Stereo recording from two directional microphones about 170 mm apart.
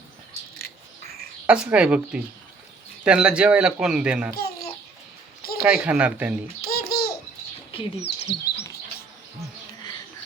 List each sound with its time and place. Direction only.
1.5 s speech: 5° right (ahead or behind)
5.4 s a sound: 65° left (ahead or behind)
5.6 s speech: 10° right (ahead or behind)
6.6 s babbling: 65° left (ahead or behind)
8.0 s chirp: 80° left